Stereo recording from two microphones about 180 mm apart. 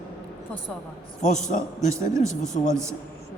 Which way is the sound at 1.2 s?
40° left (ahead or behind).